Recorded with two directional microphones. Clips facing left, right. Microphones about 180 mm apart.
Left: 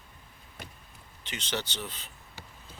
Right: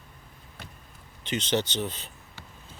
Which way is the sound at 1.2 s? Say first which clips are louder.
Right 8 dB; 20° right (ahead or behind).